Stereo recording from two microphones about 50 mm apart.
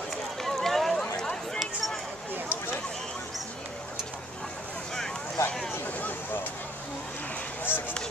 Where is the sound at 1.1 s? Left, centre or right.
Centre.